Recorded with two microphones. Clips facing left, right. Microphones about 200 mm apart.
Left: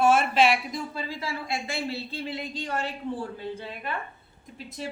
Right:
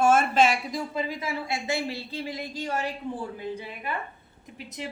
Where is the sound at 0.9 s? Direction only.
20° right (ahead or behind).